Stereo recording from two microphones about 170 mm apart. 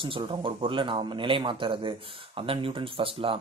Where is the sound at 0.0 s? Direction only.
30° right (ahead or behind).